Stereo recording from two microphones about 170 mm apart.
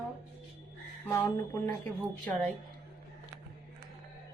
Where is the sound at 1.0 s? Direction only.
15° left (ahead or behind).